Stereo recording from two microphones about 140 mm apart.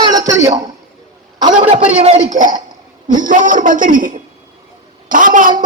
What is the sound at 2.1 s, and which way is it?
A man's voice, 65° right (ahead or behind).